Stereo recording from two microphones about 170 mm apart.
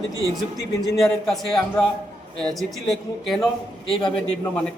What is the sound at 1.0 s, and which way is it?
Speech, centre (ahead or behind).